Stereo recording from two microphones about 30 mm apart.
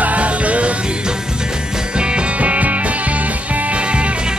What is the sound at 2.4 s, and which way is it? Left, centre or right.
Music, right.